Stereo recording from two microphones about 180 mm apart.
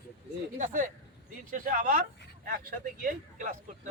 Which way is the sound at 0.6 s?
50° right (ahead or behind).